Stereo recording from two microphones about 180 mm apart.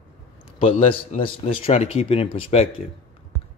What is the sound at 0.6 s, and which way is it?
Speech, 30° left (ahead or behind).